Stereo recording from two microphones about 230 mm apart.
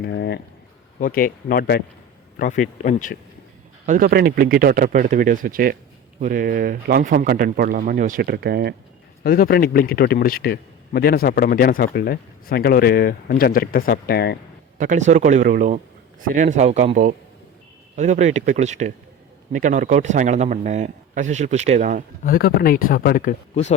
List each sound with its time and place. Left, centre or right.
0.0 s a man's voice: left
3.8 s speech: right
9.2 s a man's voice: left
14.8 s speech: right
22.2 s a man's voice: left